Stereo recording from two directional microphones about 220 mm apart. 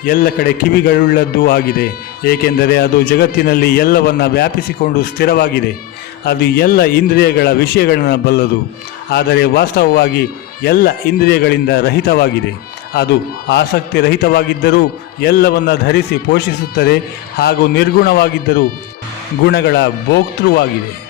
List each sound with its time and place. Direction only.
0.0 s a man's voice: 40° left (ahead or behind)
13.5 s a man's voice: 45° left (ahead or behind)